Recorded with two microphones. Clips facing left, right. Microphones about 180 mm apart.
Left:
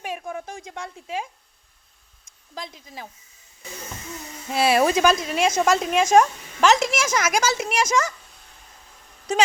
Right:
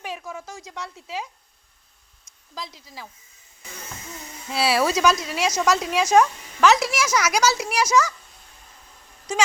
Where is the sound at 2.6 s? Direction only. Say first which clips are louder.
Left 2 dB; 20° left (ahead or behind).